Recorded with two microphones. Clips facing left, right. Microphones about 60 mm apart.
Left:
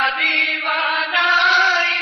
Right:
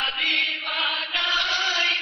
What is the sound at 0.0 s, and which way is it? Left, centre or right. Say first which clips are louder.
Chant: left 7 dB; left.